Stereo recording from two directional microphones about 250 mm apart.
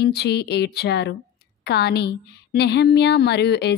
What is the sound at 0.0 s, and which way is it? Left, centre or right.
A woman's voice, left.